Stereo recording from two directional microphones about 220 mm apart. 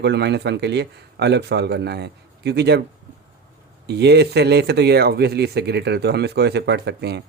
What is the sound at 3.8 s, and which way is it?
Speech, 50° right (ahead or behind).